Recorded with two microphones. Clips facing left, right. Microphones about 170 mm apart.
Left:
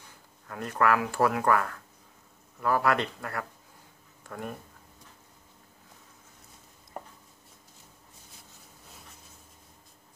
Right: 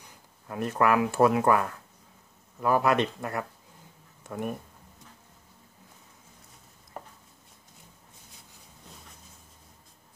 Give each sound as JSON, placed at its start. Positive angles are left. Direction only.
{"t": 0.0, "sound": "speech", "side_deg": -20}